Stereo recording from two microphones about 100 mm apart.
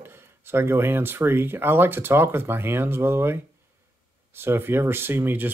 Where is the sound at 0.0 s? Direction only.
25° right (ahead or behind).